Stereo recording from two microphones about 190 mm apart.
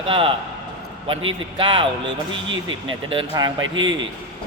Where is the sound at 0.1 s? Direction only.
30° right (ahead or behind).